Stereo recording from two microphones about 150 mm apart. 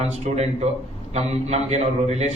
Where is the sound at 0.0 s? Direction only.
45° right (ahead or behind).